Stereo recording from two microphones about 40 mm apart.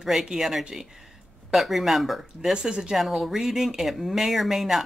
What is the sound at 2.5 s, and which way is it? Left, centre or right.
Speech, centre.